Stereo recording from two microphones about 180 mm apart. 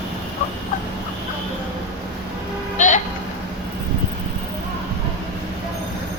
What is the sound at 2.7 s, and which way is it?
Bleat, 45° left (ahead or behind).